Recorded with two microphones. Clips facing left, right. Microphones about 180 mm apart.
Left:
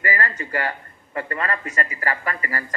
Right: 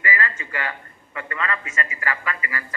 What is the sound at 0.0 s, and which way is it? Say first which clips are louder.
A man's voice: left 1 dB; 40° left (ahead or behind).